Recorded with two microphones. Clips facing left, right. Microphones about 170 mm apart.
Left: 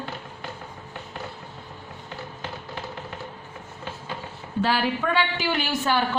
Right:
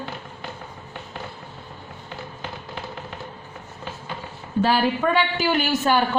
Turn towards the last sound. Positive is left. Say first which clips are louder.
# right 4 dB
turn(degrees=-45)  # may be behind; listen again after turning